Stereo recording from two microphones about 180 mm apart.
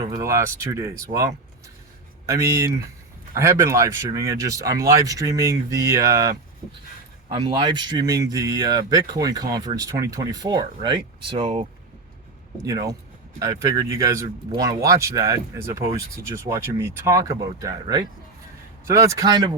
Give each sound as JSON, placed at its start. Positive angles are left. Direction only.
{"t": 0.0, "sound": "speech", "side_deg": -20}
{"t": 12.6, "sound": "speech", "side_deg": -20}